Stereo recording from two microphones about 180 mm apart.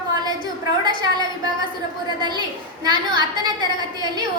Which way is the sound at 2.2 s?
25° right (ahead or behind).